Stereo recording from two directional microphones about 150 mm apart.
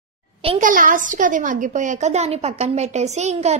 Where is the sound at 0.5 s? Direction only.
65° right (ahead or behind).